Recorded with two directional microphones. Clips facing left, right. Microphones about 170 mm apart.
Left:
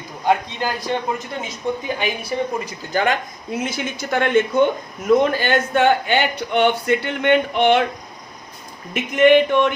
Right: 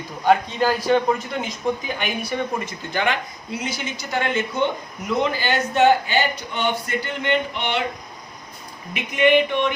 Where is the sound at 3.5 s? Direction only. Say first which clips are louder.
Left 4 dB; 50° left (ahead or behind).